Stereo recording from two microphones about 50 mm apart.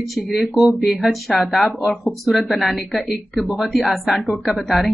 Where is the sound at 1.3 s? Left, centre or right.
Left.